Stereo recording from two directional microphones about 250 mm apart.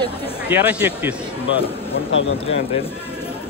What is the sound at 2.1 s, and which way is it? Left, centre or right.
Speech, left.